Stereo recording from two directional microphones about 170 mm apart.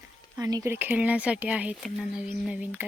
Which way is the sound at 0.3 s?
20° right (ahead or behind).